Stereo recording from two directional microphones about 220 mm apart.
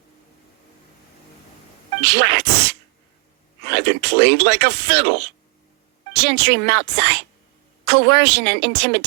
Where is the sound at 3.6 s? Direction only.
50° right (ahead or behind).